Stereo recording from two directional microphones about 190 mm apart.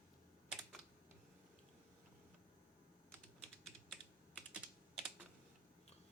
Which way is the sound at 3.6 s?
5° left (ahead or behind).